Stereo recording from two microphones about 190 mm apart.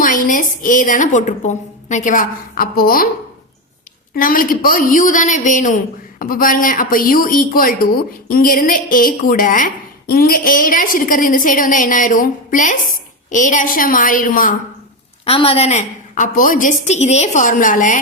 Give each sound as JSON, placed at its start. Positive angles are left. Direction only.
{"t": 0.0, "sound": "a woman's voice", "side_deg": 45}
{"t": 4.1, "sound": "a woman's voice", "side_deg": 45}
{"t": 15.2, "sound": "a woman's voice", "side_deg": 30}